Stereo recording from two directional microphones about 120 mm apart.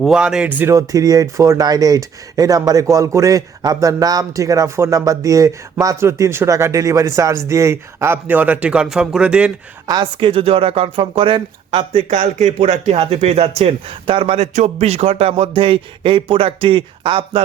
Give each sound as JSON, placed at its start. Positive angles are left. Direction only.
{"t": 0.0, "sound": "speech", "side_deg": -5}
{"t": 0.7, "sound": "speech", "side_deg": -30}
{"t": 9.8, "sound": "a sound", "side_deg": -35}
{"t": 12.1, "sound": "speech", "side_deg": -85}
{"t": 12.5, "sound": "speech", "side_deg": -55}
{"t": 14.5, "sound": "a sound", "side_deg": -75}